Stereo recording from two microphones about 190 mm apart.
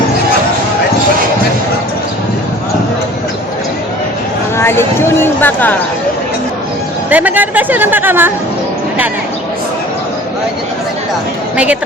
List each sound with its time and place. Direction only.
4.5 s speech: 10° left (ahead or behind)
7.1 s speech: 10° right (ahead or behind)
11.5 s speech: 5° right (ahead or behind)